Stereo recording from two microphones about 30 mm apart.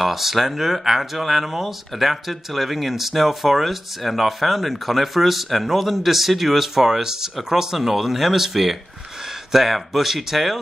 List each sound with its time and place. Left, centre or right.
0.0 s speech: centre